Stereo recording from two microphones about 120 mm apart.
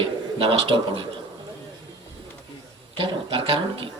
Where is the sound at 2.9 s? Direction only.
45° right (ahead or behind).